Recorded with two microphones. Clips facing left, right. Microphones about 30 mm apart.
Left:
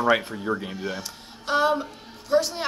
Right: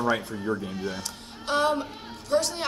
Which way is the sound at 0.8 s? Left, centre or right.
Centre.